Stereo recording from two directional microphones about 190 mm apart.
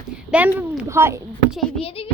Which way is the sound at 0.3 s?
5° right (ahead or behind).